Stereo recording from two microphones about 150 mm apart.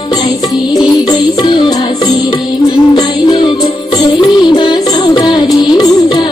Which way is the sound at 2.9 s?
30° left (ahead or behind).